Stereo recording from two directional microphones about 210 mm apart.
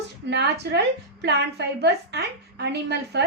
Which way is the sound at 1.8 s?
50° right (ahead or behind).